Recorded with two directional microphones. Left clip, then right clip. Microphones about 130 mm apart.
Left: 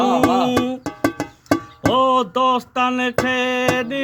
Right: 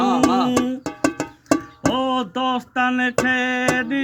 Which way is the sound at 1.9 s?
35° left (ahead or behind).